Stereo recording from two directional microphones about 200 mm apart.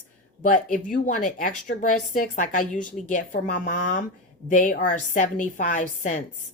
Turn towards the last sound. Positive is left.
turn(degrees=40)  # may be behind; listen again after turning